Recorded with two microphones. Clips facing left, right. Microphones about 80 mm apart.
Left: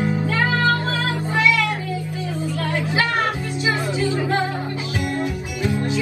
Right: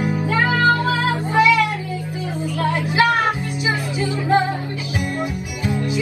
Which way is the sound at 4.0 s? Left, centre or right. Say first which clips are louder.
Right 6 dB; right.